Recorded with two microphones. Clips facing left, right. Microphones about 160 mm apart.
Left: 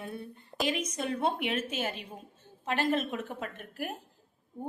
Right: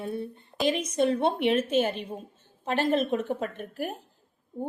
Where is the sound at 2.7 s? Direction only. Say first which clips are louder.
Right 5 dB; 30° right (ahead or behind).